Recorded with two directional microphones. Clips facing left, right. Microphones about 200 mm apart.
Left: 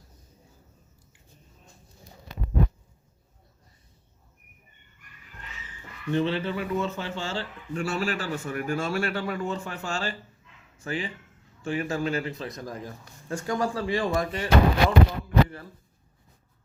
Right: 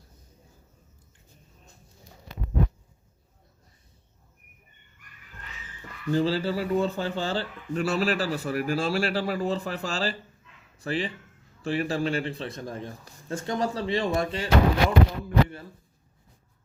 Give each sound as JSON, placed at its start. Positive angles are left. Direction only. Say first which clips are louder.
{"t": 6.1, "sound": "speech", "louder": "right 1 dB", "side_deg": -35}